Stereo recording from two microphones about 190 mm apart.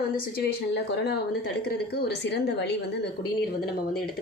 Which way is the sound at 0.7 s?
60° left (ahead or behind).